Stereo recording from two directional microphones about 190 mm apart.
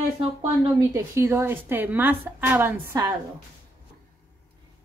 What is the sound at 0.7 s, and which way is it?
A woman's voice, 15° right (ahead or behind).